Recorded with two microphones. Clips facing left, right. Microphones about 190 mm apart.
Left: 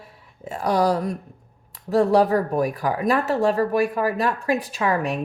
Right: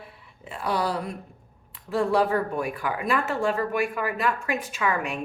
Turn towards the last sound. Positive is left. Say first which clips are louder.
# left 4 dB
turn(degrees=35)  # may be behind; listen again after turning